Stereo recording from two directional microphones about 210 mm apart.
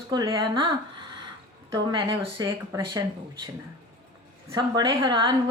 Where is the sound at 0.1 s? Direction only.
20° right (ahead or behind).